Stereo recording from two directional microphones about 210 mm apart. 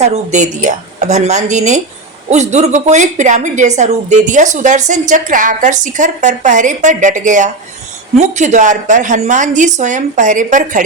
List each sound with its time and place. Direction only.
0.0 s a woman's voice: 35° right (ahead or behind)